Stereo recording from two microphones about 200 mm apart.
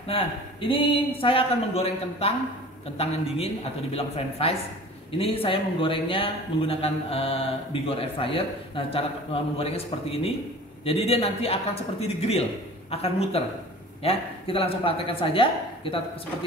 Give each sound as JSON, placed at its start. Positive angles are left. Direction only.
{"t": 0.1, "sound": "a man's voice", "side_deg": 25}
{"t": 3.9, "sound": "a man's voice", "side_deg": 30}